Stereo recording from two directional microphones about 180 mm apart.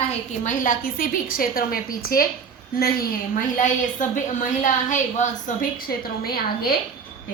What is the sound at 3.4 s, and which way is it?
A woman's voice, 45° left (ahead or behind).